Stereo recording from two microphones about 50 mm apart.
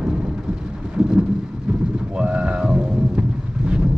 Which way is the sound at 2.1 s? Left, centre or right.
Right.